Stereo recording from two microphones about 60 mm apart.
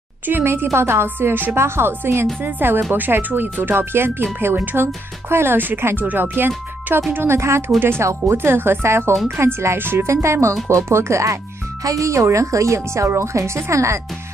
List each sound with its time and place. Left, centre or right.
0.3 s speech: right
7.2 s speech: right
8.4 s speech: right
10.0 s a woman's voice: right
11.8 s a woman's voice: right